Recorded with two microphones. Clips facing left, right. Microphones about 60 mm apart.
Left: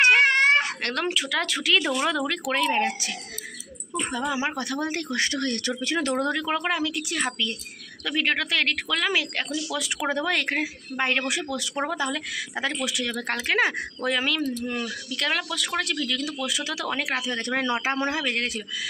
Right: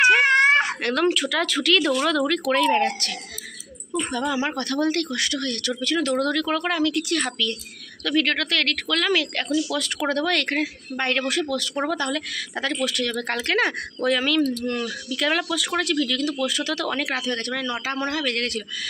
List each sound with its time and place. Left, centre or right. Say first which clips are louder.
0.0 s a woman's voice: right 2 dB; centre
5.1 s a woman's voice: even; left; by 17.4 s centre
17.6 s speech: left 2 dB; left
18.3 s a woman's voice: right 2 dB; centre